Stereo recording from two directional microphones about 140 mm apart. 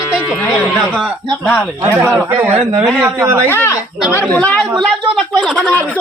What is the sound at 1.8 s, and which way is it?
A man's voice, 15° right (ahead or behind).